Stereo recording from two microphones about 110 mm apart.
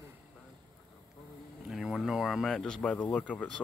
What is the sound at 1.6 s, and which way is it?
Speech, centre (ahead or behind).